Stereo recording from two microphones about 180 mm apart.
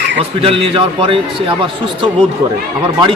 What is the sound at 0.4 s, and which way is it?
A man's voice, 30° right (ahead or behind).